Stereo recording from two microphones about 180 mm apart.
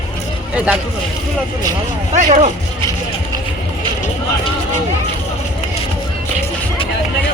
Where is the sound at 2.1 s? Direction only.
40° right (ahead or behind).